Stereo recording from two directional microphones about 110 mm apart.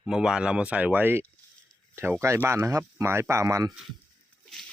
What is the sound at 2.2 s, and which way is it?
Speech, 25° right (ahead or behind).